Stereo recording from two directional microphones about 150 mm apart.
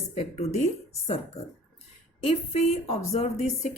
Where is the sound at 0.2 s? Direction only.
45° left (ahead or behind).